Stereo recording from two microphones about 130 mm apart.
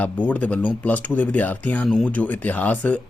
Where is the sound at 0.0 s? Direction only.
10° left (ahead or behind).